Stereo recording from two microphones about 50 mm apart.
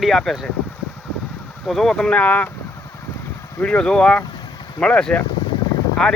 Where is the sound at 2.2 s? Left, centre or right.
Left.